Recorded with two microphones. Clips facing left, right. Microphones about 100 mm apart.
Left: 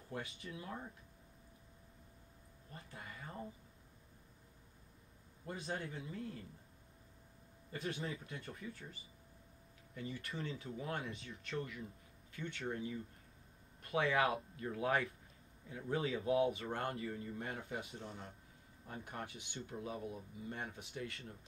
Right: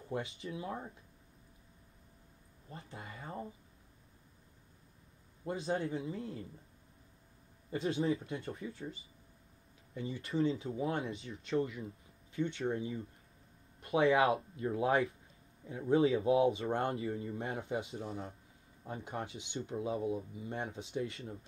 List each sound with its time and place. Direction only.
0.1 s speech: 20° right (ahead or behind)
2.7 s speech: 25° right (ahead or behind)
5.4 s speech: 25° right (ahead or behind)
7.7 s speech: 25° right (ahead or behind)